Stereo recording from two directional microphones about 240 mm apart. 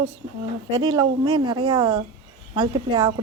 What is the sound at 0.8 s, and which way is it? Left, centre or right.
A woman's voice, centre.